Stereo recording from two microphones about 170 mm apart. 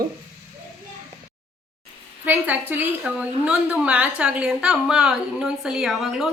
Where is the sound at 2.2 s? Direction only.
10° right (ahead or behind).